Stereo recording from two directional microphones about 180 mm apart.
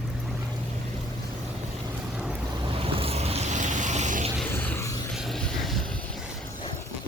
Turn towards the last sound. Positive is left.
turn(degrees=0)  # may be behind; listen again after turning